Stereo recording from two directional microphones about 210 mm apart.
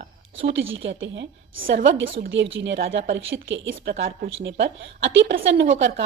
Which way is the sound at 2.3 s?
60° right (ahead or behind).